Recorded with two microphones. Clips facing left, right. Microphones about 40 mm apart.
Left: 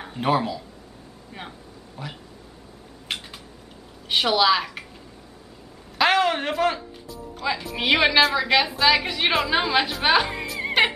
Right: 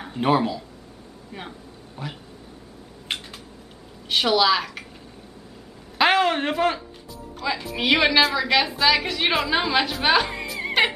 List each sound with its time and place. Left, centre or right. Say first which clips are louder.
0.0 s speech: right 2 dB; centre
2.0 s speech: right 2 dB; centre
3.1 s a sound: right 1 dB; centre
4.1 s a woman's voice: even; centre
5.9 s a woman's voice: right 1 dB; centre